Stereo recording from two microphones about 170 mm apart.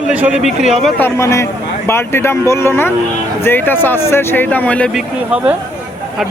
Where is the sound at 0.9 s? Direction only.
15° left (ahead or behind).